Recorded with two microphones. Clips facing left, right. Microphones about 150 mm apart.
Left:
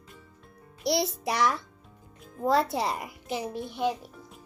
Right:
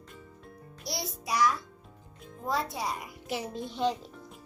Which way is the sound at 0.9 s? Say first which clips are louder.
Left 8 dB; 65° left (ahead or behind).